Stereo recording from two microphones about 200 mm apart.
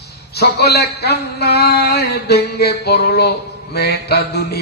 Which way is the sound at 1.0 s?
55° left (ahead or behind).